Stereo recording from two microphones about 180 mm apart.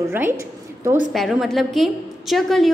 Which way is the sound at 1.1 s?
Centre (ahead or behind).